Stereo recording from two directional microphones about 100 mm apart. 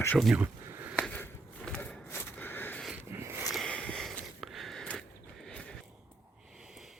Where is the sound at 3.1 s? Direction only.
25° right (ahead or behind).